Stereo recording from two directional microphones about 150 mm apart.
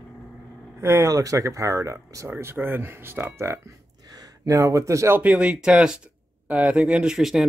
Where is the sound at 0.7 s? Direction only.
20° right (ahead or behind).